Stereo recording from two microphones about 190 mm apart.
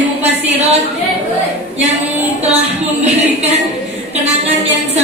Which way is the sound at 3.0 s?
35° right (ahead or behind).